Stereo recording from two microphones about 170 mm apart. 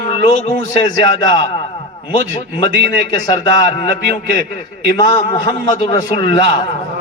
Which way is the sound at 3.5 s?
35° left (ahead or behind).